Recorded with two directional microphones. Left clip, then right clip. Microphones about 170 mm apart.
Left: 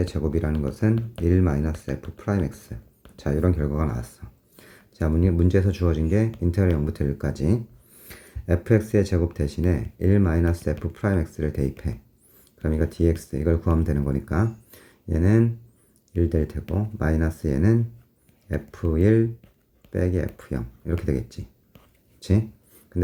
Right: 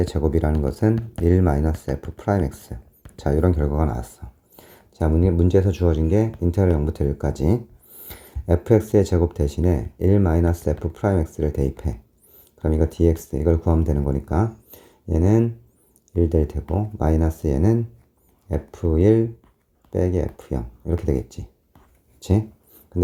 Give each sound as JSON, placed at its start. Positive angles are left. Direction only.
{"t": 0.0, "sound": "speech", "side_deg": -30}